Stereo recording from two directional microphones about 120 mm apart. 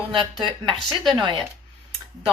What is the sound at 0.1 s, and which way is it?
Speech, 45° right (ahead or behind).